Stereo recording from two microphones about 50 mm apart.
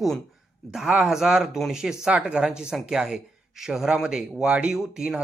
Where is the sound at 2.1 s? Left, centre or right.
Right.